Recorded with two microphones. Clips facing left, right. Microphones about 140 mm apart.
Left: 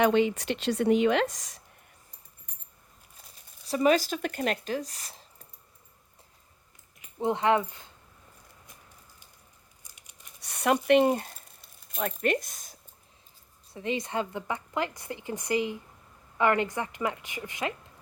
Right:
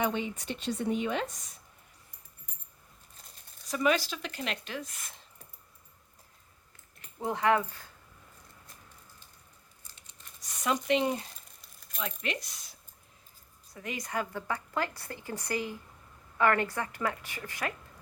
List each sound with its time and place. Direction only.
0.0 s a woman's voice: 85° left
3.7 s speech: 35° left (ahead or behind)
7.2 s a woman's voice: 25° left (ahead or behind)
9.8 s scissors: 15° left (ahead or behind)
10.4 s speech: 65° left (ahead or behind); by 12.7 s 50° left (ahead or behind)
13.7 s a woman's voice: 25° left (ahead or behind)